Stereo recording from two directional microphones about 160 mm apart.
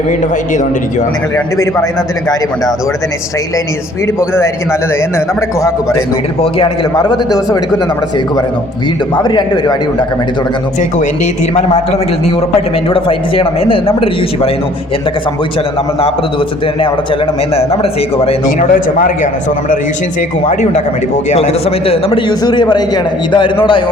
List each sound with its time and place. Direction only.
6.4 s a man's voice: 30° left (ahead or behind)
9.1 s a man's voice: 25° left (ahead or behind)
12.5 s a man's voice: 35° left (ahead or behind)
17.5 s a man's voice: 40° left (ahead or behind)
18.4 s speech: 60° left (ahead or behind)
20.5 s a man's voice: 50° left (ahead or behind)
22.3 s a man's voice: 25° left (ahead or behind)